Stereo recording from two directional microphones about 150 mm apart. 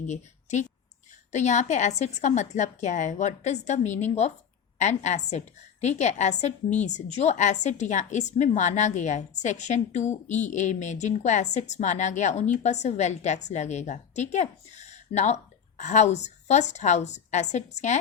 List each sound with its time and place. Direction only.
0.1 s a woman's voice: 50° left (ahead or behind)